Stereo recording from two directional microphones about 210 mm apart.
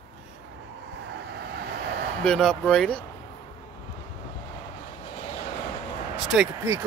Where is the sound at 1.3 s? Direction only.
50° right (ahead or behind).